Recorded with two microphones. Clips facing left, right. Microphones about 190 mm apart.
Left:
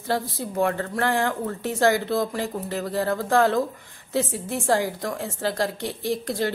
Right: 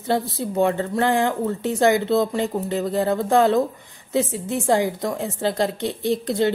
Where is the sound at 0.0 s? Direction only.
25° right (ahead or behind).